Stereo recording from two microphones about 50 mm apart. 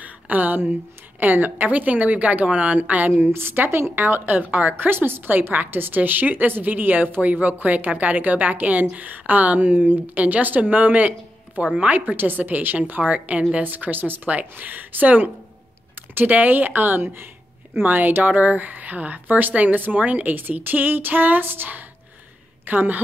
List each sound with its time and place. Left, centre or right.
0.0 s a sound: right
1.2 s a woman's voice: right
3.2 s a woman's voice: right